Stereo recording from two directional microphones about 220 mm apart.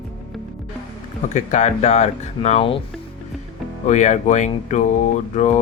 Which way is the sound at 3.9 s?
35° left (ahead or behind).